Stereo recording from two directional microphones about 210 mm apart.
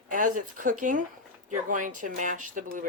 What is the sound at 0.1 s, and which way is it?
Speech, 40° right (ahead or behind).